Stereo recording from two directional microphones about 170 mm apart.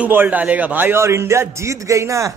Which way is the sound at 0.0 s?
10° right (ahead or behind).